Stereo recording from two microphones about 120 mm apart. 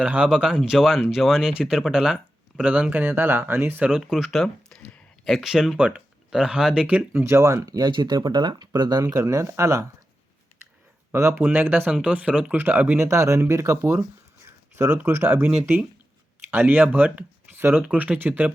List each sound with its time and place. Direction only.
0.0 s speech: 5° right (ahead or behind); by 9.8 s 25° right (ahead or behind)
11.1 s speech: 20° right (ahead or behind)
13.1 s speech: 25° right (ahead or behind)